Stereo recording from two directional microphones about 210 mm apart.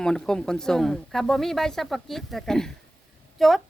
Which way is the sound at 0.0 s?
5° left (ahead or behind).